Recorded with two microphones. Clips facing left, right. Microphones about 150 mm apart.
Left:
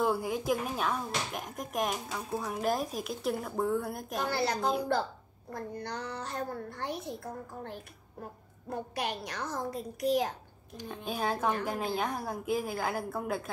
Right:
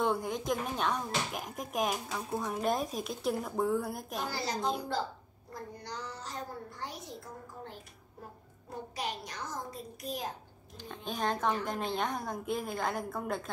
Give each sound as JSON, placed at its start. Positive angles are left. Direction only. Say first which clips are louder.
{"t": 0.0, "sound": "speech", "louder": "left 2 dB", "side_deg": 5}
{"t": 4.2, "sound": "a child's voice", "louder": "left 5 dB", "side_deg": 60}
{"t": 8.6, "sound": "a child's voice", "louder": "left 4 dB", "side_deg": 65}
{"t": 10.8, "sound": "a child's voice", "louder": "left 1 dB", "side_deg": 10}